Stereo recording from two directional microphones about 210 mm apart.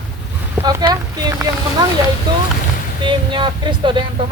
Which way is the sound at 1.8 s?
20° right (ahead or behind).